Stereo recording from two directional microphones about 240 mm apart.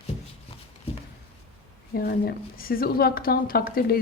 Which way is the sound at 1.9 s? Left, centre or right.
Left.